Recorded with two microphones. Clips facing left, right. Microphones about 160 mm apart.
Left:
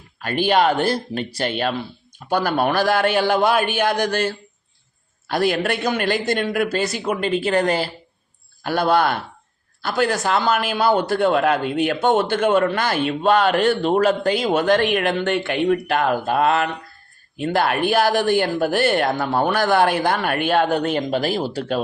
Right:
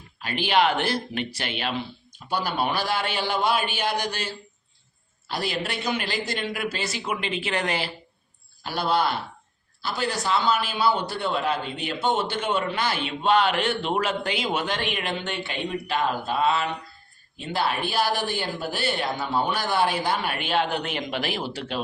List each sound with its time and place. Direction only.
0.2 s a man's voice: 50° left (ahead or behind)
8.6 s a man's voice: 50° left (ahead or behind)